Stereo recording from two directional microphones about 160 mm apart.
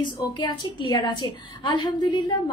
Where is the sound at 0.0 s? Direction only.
30° left (ahead or behind).